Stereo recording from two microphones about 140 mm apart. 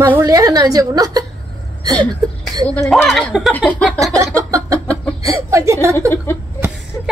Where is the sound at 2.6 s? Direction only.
10° left (ahead or behind).